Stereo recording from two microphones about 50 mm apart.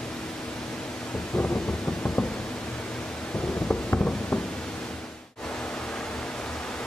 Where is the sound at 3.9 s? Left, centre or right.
Left.